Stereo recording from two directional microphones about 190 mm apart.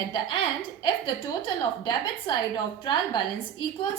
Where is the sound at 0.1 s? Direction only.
25° left (ahead or behind).